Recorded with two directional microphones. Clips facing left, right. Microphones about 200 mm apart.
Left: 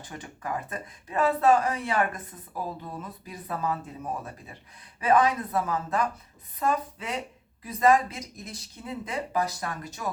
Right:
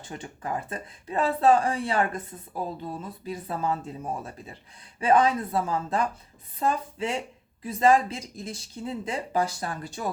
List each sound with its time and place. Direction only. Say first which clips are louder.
0.0 s speech: right 2 dB; 25° right (ahead or behind)